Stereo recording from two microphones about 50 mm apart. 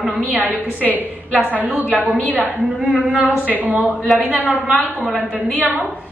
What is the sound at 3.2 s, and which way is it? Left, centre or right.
Speech, right.